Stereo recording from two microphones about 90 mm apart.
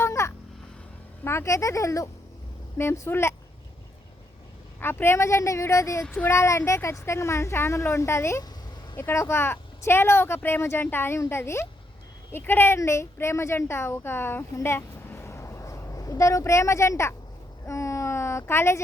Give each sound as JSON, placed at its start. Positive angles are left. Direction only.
{"t": 0.0, "sound": "a sound", "side_deg": 30}
{"t": 1.2, "sound": "speech", "side_deg": 30}
{"t": 4.8, "sound": "speech", "side_deg": 25}
{"t": 6.0, "sound": "speech", "side_deg": 15}
{"t": 6.3, "sound": "a woman's voice", "side_deg": 30}
{"t": 17.7, "sound": "a sound", "side_deg": 35}